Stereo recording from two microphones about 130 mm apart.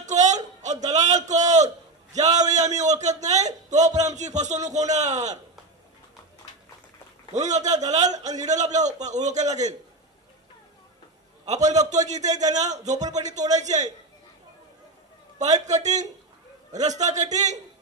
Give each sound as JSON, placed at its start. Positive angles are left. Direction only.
{"t": 0.0, "sound": "a sound", "side_deg": -65}
{"t": 2.5, "sound": "a man's voice", "side_deg": -65}
{"t": 7.3, "sound": "a man's voice", "side_deg": -65}
{"t": 11.4, "sound": "a man's voice", "side_deg": -65}
{"t": 15.3, "sound": "a man's voice", "side_deg": -65}